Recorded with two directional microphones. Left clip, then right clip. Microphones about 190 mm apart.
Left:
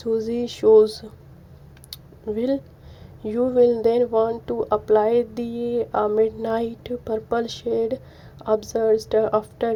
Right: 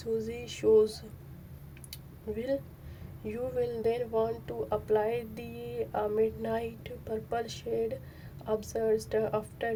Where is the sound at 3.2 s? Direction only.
25° left (ahead or behind).